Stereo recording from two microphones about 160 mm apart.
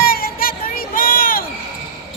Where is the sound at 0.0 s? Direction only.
65° left (ahead or behind).